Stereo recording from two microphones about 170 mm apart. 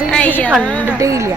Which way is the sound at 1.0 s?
20° right (ahead or behind).